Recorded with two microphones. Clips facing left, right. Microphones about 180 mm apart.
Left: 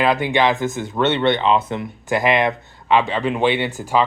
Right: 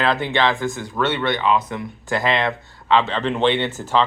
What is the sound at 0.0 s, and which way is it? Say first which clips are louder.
Speech: left 2 dB; 15° left (ahead or behind).